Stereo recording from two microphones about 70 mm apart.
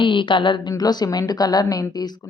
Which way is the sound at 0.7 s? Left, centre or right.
Left.